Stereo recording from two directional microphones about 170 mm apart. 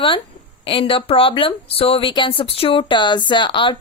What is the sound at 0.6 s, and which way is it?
A woman's voice, 35° left (ahead or behind).